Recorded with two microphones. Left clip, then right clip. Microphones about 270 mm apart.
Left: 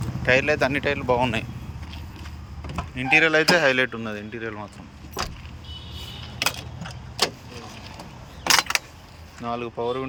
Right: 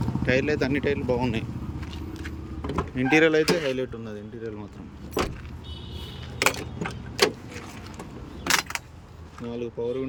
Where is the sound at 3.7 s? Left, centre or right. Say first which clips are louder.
Left 8 dB; left.